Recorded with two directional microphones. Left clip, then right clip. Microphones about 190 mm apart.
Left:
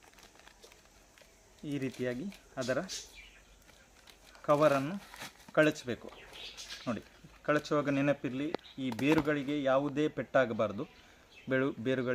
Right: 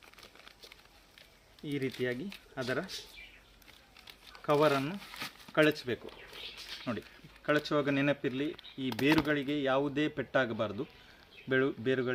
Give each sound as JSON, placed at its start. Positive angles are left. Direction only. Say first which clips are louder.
{"t": 0.2, "sound": "a sound", "louder": "right 3 dB", "side_deg": 0}
{"t": 1.6, "sound": "speech", "louder": "right 2 dB", "side_deg": 25}
{"t": 4.4, "sound": "speech", "louder": "left 1 dB", "side_deg": 20}
{"t": 4.9, "sound": "speech", "louder": "right 4 dB", "side_deg": 0}
{"t": 5.5, "sound": "speech", "louder": "even", "side_deg": 20}
{"t": 7.4, "sound": "speech", "louder": "right 1 dB", "side_deg": 15}
{"t": 8.9, "sound": "speech", "louder": "right 1 dB", "side_deg": -15}
{"t": 9.2, "sound": "speech", "louder": "even", "side_deg": 15}